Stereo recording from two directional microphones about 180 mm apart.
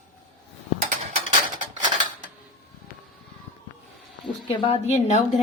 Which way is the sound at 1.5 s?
25° right (ahead or behind).